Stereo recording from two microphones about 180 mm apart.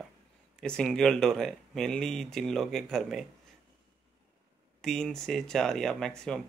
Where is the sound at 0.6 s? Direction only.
5° left (ahead or behind).